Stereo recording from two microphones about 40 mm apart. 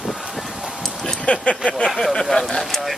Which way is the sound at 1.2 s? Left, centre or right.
Left.